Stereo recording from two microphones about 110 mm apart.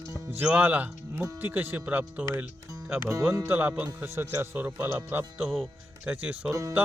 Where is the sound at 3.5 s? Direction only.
15° right (ahead or behind).